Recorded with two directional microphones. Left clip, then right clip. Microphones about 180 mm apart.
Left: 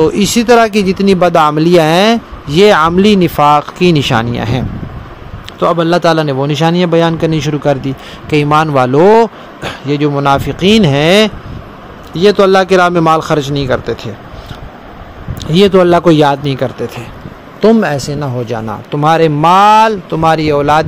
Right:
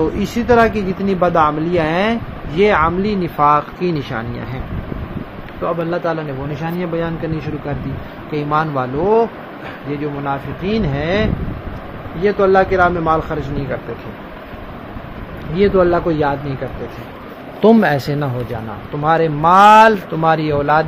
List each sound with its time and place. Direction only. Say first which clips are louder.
0.0 s speech: left 8 dB; 65° left (ahead or behind)
5.6 s speech: left 9 dB; 80° left
8.3 s a man's voice: left 8 dB; 60° left (ahead or behind); by 11.2 s 75° left (ahead or behind)
12.2 s speech: left 6 dB; 90° left; by 13.7 s 75° left (ahead or behind)
15.6 s speech: left 6 dB; 75° left (ahead or behind)
17.7 s speech: left 2 dB; 15° left (ahead or behind)
19.0 s speech: left 5 dB; 50° left (ahead or behind)